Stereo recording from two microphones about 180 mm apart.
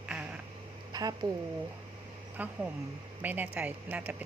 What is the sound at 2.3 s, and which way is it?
Speech, 10° right (ahead or behind).